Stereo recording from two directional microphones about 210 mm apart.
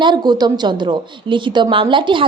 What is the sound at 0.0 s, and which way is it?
A woman's voice, 20° right (ahead or behind).